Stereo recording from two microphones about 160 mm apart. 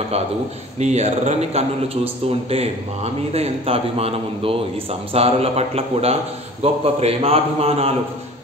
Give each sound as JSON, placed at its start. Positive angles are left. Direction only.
{"t": 0.7, "sound": "a man's voice", "side_deg": -45}